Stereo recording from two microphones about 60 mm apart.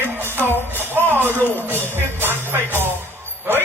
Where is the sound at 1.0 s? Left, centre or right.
Right.